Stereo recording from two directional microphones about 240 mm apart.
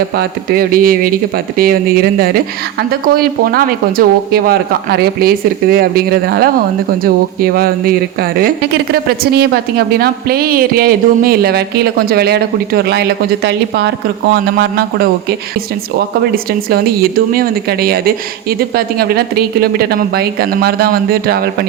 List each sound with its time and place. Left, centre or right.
0.2 s speech: right
16.0 s speech: right